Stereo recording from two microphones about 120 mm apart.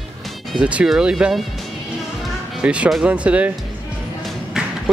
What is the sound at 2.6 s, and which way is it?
Speech, 10° right (ahead or behind).